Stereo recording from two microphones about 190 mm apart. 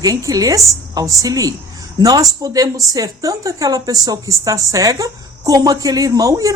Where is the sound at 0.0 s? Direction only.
20° right (ahead or behind).